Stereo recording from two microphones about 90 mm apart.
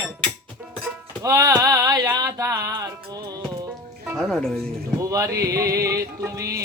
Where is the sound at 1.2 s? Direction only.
40° right (ahead or behind).